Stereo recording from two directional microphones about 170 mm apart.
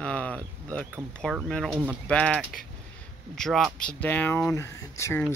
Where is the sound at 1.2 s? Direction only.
5° left (ahead or behind).